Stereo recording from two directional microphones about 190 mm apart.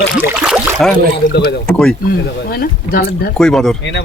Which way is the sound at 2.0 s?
55° left (ahead or behind).